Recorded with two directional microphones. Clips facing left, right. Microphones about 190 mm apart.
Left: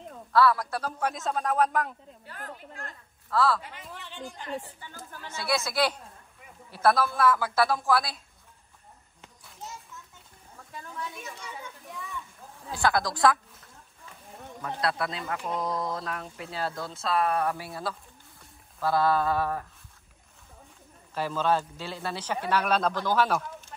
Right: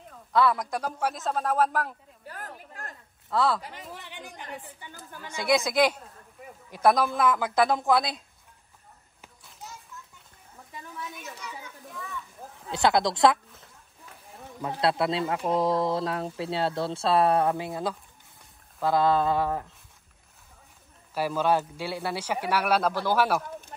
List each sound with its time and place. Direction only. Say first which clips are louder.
0.3 s a man's voice: left 1 dB; 20° right (ahead or behind); by 2.0 s 5° right (ahead or behind)
2.2 s speech: right 1 dB; 40° right (ahead or behind)
3.3 s speech: even; 20° right (ahead or behind)
10.7 s a sound: left 1 dB; 20° right (ahead or behind)
12.7 s speech: right 3 dB; 20° right (ahead or behind)
14.8 s speech: right 6 dB; 25° right (ahead or behind)
21.1 s speech: right 2 dB; 10° right (ahead or behind)